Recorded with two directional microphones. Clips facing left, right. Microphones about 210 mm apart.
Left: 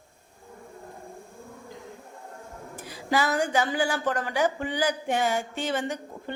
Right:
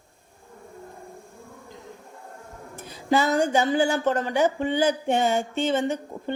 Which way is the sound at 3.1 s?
25° right (ahead or behind).